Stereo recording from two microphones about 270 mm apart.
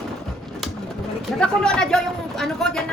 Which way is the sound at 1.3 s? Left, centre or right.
Centre.